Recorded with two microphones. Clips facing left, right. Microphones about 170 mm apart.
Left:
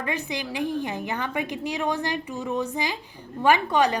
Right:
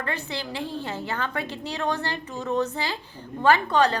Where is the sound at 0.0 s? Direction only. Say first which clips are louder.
Left 2 dB; 15° left (ahead or behind).